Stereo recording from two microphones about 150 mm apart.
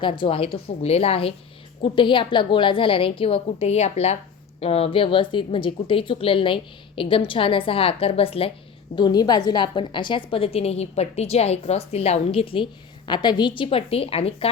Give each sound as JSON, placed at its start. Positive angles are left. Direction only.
{"t": 0.0, "sound": "a woman's voice", "side_deg": 35}
{"t": 9.0, "sound": "a woman's voice", "side_deg": 25}